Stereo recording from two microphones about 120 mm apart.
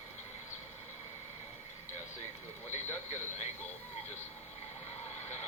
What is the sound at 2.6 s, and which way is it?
Speech, 75° left (ahead or behind).